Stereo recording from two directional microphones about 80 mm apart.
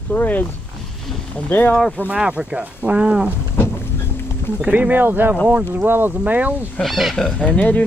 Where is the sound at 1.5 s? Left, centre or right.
Left.